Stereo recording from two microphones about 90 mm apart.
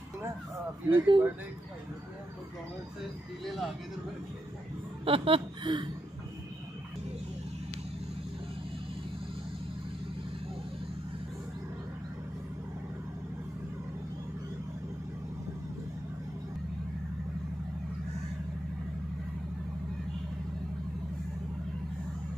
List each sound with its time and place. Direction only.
0.8 s speech: 60° right (ahead or behind)
5.0 s speech: 80° right; by 5.9 s 60° right (ahead or behind)